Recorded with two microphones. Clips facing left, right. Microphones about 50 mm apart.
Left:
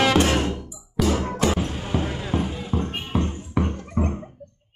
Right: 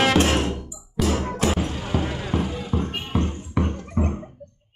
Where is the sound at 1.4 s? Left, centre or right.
Centre.